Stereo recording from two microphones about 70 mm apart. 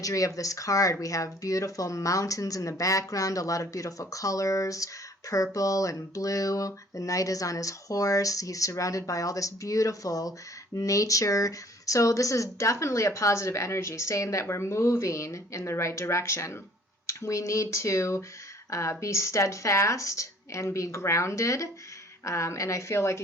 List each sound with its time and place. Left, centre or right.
0.0 s speech: left